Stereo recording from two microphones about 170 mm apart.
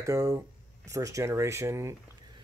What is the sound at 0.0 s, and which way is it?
Speech, 20° right (ahead or behind).